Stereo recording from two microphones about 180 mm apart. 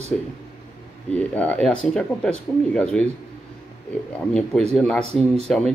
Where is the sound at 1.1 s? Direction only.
10° left (ahead or behind).